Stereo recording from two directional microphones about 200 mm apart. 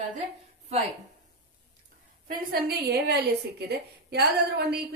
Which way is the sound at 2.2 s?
50° right (ahead or behind).